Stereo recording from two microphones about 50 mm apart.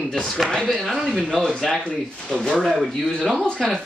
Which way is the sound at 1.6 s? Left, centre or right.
Centre.